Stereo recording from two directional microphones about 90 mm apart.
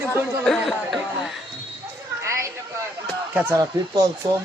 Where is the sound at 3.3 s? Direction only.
20° right (ahead or behind).